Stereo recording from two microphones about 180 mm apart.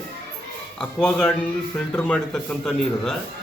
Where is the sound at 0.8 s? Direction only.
5° left (ahead or behind).